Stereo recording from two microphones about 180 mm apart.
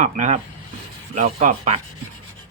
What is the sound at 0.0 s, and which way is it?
Speech, 40° right (ahead or behind).